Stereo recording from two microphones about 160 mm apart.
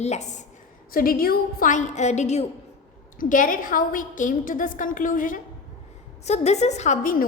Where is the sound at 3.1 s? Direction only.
55° left (ahead or behind).